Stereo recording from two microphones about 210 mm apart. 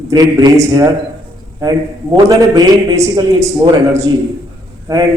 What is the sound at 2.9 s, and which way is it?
A man's voice, 15° right (ahead or behind).